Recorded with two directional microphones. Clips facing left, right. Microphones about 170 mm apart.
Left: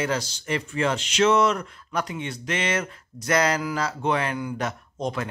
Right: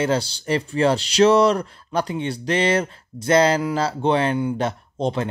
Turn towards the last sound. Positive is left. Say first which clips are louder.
# right 5 dB
turn(degrees=-30)  # may be behind; listen again after turning